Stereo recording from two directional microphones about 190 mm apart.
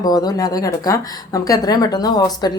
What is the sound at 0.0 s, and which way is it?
Speech, 20° left (ahead or behind).